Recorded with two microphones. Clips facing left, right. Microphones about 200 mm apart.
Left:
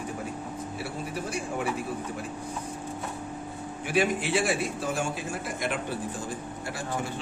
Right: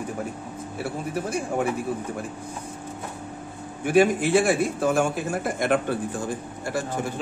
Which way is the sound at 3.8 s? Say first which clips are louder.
Right 7 dB; 50° right (ahead or behind).